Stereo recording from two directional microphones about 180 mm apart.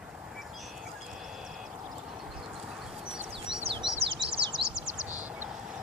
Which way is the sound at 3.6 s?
30° right (ahead or behind).